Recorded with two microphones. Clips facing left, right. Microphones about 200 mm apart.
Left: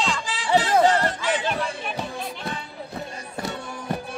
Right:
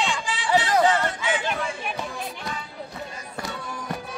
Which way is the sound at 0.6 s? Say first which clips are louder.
Left 2 dB; 40° left (ahead or behind).